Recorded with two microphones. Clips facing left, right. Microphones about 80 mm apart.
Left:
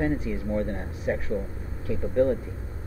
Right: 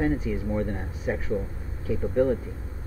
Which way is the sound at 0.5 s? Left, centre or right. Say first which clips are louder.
Left 3 dB; centre.